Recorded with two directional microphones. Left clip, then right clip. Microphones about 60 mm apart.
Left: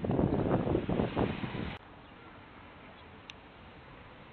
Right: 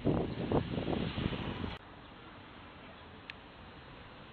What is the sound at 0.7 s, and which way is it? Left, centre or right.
Waves, left.